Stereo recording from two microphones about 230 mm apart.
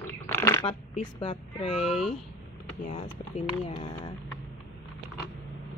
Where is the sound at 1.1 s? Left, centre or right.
Left.